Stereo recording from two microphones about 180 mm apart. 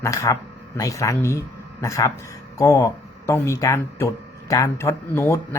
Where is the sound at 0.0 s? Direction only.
15° left (ahead or behind).